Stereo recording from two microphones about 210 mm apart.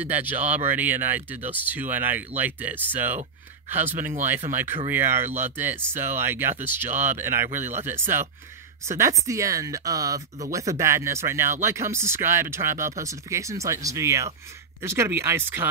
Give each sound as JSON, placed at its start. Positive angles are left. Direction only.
{"t": 0.0, "sound": "speech", "side_deg": -10}
{"t": 8.9, "sound": "speech", "side_deg": -15}